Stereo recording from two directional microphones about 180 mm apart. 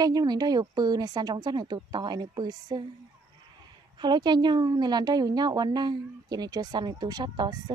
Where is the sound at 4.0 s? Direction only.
25° right (ahead or behind).